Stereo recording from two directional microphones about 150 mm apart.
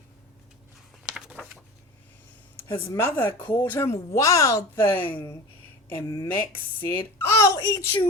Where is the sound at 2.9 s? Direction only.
15° left (ahead or behind).